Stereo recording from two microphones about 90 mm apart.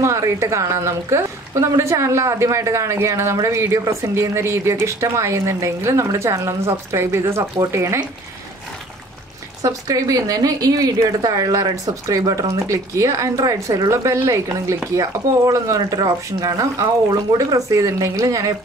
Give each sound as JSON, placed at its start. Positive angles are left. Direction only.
{"t": 0.0, "sound": "a woman's voice", "side_deg": -35}
{"t": 9.6, "sound": "a woman's voice", "side_deg": -40}